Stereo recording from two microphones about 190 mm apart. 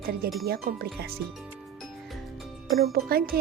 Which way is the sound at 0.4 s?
50° right (ahead or behind).